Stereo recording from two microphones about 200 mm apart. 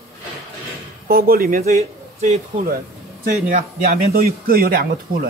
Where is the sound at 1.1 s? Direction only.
50° right (ahead or behind).